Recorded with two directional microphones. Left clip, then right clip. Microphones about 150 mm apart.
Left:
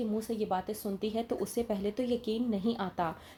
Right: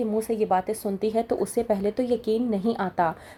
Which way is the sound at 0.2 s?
50° right (ahead or behind).